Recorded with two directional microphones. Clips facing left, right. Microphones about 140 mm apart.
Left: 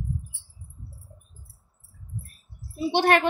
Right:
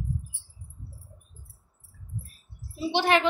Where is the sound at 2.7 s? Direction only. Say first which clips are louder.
Left 3 dB; 50° left (ahead or behind).